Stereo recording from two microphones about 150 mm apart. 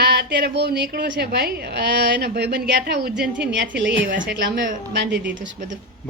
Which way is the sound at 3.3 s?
10° right (ahead or behind).